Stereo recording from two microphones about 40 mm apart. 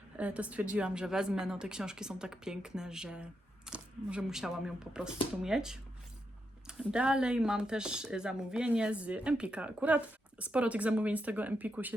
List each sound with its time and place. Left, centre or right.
0.2 s speech: right
1.0 s a woman's voice: centre
3.7 s camera: right
4.3 s a woman's voice: centre; by 11.9 s right